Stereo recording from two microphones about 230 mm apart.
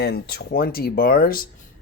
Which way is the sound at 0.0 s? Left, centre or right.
Left.